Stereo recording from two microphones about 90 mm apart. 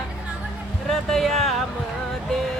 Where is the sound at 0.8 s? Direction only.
5° left (ahead or behind).